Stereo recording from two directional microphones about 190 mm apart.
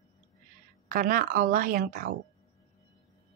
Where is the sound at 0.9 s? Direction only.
45° right (ahead or behind).